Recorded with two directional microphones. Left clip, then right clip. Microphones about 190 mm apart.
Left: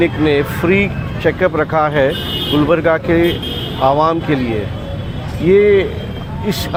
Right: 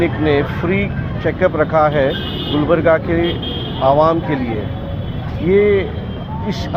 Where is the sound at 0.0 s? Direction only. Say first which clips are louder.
Left 2 dB; 45° left (ahead or behind).